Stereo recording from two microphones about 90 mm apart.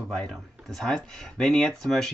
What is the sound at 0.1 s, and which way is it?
Speech, 5° left (ahead or behind).